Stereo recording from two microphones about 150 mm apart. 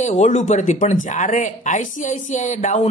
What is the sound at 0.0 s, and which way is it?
Speech, 50° left (ahead or behind).